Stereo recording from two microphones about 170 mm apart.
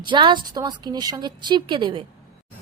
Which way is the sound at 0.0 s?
25° right (ahead or behind).